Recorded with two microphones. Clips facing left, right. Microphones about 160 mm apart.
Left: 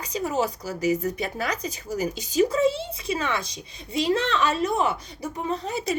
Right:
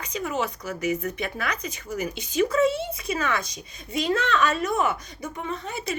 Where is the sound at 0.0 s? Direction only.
35° left (ahead or behind).